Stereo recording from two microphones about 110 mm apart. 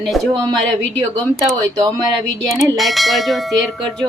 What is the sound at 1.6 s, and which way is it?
Speech, 35° right (ahead or behind).